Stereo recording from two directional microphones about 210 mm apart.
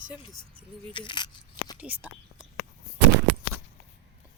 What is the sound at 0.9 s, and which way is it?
Coin, 25° left (ahead or behind).